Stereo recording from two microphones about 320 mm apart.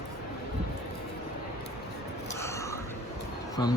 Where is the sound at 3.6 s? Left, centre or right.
Centre.